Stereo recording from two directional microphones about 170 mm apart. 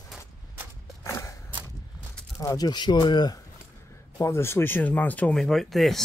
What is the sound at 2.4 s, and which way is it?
Speech, 20° left (ahead or behind).